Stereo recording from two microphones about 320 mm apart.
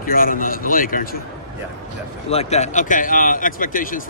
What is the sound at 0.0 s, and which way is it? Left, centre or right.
A man's voice, left.